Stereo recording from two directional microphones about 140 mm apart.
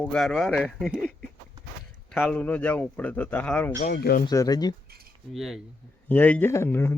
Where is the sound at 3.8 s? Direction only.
80° left.